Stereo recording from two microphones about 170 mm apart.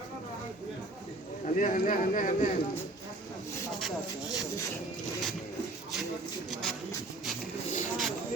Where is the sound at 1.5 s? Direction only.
55° left (ahead or behind).